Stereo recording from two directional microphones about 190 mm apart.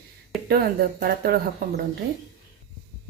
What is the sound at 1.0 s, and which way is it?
Speech, 55° right (ahead or behind).